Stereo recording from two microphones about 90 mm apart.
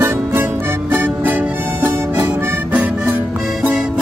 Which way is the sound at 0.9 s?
20° right (ahead or behind).